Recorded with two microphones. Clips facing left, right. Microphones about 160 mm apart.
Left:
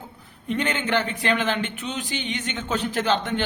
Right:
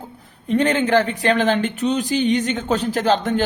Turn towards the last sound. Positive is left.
turn(degrees=-40)  # may be behind; listen again after turning